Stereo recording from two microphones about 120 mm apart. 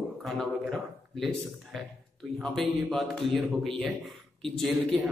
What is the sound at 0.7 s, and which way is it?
A man's voice, 5° left (ahead or behind).